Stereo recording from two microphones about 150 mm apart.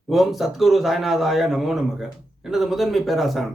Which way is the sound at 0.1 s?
Centre (ahead or behind).